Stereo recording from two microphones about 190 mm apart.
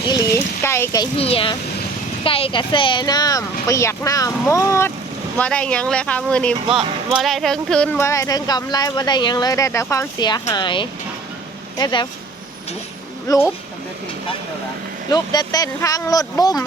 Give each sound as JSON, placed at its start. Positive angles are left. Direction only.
{"t": 0.1, "sound": "a sound", "side_deg": 15}
{"t": 1.2, "sound": "speech", "side_deg": 30}
{"t": 13.3, "sound": "speech", "side_deg": 20}
{"t": 15.1, "sound": "speech", "side_deg": 20}